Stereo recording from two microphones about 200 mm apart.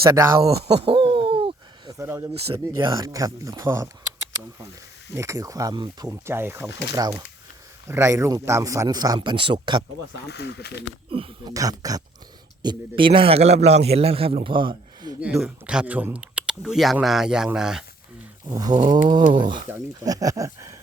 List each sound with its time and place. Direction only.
0.1 s a man's voice: 15° right (ahead or behind)
0.5 s hoot: 25° right (ahead or behind)
2.0 s a man's voice: 15° right (ahead or behind)
5.1 s a man's voice: 15° right (ahead or behind)
6.7 s speech: 60° left (ahead or behind)
6.9 s a man's voice: 15° right (ahead or behind)
10.2 s speech: 60° left (ahead or behind)
11.1 s speech: 25° right (ahead or behind)
11.5 s a man's voice: 15° right (ahead or behind)
15.2 s speech: 5° right (ahead or behind)
18.4 s a man's voice: 20° right (ahead or behind)
19.5 s speech: 40° right (ahead or behind)
19.7 s a man's voice: 15° right (ahead or behind)